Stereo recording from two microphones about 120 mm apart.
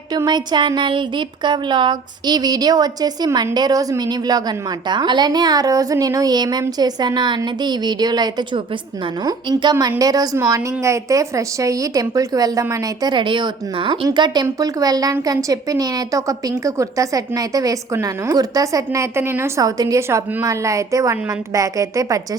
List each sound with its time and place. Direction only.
0.1 s a woman's voice: 35° right (ahead or behind)